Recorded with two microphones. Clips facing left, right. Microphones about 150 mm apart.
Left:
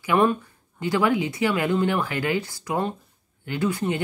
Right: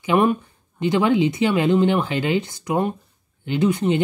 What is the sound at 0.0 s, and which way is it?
Speech, 20° right (ahead or behind).